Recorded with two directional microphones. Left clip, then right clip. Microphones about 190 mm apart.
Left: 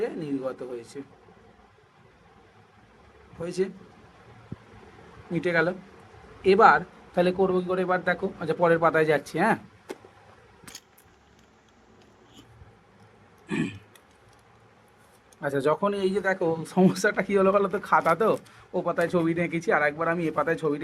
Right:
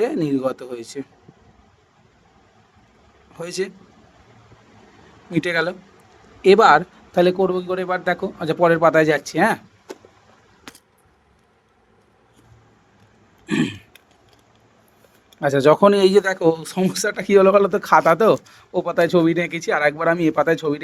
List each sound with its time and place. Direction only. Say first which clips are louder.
0.0 s speech: right 9 dB; 60° right (ahead or behind)
3.4 s speech: right 3 dB; 60° right (ahead or behind)
5.3 s speech: right 4 dB; 55° right (ahead or behind)
13.5 s a sound: right 8 dB; 35° right (ahead or behind)
15.4 s speech: right 11 dB; 40° right (ahead or behind)